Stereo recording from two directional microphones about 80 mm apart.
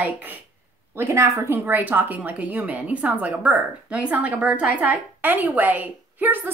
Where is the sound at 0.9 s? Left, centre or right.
Right.